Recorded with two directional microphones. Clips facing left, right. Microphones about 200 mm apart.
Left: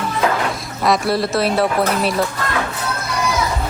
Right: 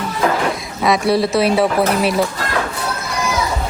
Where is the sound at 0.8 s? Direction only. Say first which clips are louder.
Right 2 dB; centre (ahead or behind).